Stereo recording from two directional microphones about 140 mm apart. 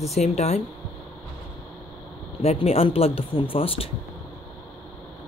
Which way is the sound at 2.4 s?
45° left (ahead or behind).